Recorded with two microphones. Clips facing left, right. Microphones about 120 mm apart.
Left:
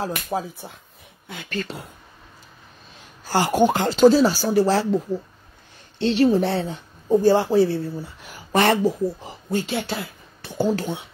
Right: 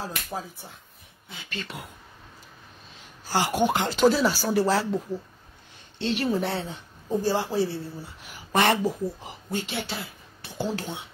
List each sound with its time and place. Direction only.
0.0 s speech: 75° left (ahead or behind)
1.3 s a woman's voice: 55° left (ahead or behind)
3.3 s speech: 50° left (ahead or behind); by 4.8 s 30° left (ahead or behind)
5.9 s a woman's voice: 35° left (ahead or behind); by 7.7 s 55° left (ahead or behind)
8.5 s speech: 40° left (ahead or behind)